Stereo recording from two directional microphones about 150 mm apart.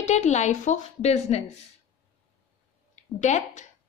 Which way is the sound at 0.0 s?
50° left (ahead or behind).